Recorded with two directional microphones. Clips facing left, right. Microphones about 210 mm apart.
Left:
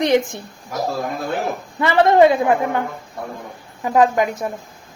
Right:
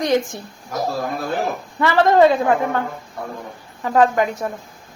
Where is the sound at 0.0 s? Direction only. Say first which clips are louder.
Left 2 dB; 20° left (ahead or behind).